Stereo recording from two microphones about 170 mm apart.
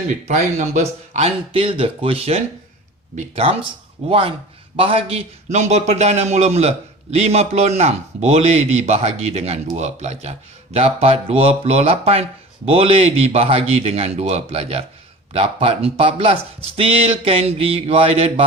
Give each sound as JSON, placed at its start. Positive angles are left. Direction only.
{"t": 0.1, "sound": "a man's voice", "side_deg": -45}